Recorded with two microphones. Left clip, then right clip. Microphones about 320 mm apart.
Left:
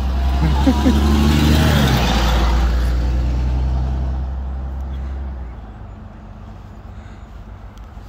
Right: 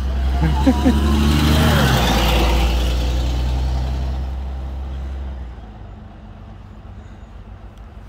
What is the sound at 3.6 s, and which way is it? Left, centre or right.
Vehicle, right.